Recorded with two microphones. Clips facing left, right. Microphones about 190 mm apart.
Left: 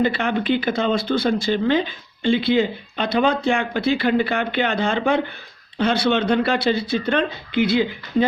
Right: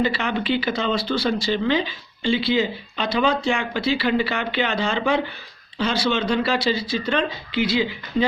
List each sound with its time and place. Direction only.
0.0 s speech: 55° left (ahead or behind)